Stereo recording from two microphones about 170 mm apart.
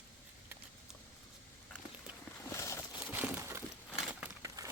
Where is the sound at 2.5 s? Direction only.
15° left (ahead or behind).